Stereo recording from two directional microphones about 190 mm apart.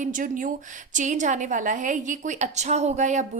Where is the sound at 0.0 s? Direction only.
45° right (ahead or behind).